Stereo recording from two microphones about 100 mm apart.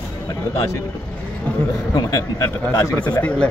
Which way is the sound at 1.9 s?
35° left (ahead or behind).